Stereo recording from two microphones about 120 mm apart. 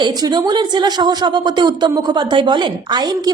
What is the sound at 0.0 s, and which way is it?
A man's voice, 35° right (ahead or behind).